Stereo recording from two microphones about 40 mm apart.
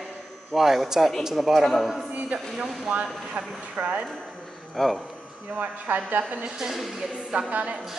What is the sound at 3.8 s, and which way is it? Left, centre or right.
Speech, right.